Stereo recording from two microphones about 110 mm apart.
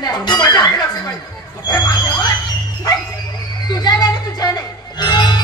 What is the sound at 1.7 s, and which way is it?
Squeal, 40° left (ahead or behind).